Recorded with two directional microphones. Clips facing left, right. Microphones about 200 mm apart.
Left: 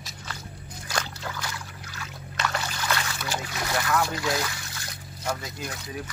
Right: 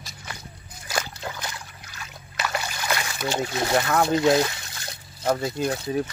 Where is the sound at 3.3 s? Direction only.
25° right (ahead or behind).